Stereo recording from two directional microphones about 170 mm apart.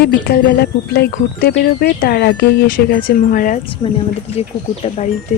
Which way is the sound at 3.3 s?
50° left (ahead or behind).